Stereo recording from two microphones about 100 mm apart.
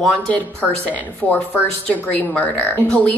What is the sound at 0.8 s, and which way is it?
A woman's voice, 15° left (ahead or behind).